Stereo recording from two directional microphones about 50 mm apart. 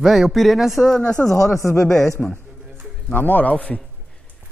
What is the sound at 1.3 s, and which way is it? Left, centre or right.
Speech, left.